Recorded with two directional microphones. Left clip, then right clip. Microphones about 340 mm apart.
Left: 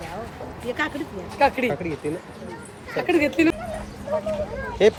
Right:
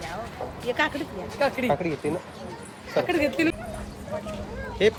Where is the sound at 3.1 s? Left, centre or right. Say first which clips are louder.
Left 6 dB; left.